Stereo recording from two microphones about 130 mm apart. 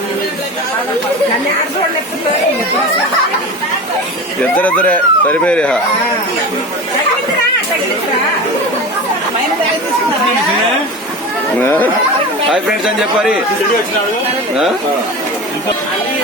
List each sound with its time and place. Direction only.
4.5 s speech: 10° left (ahead or behind)
11.6 s speech: 15° left (ahead or behind)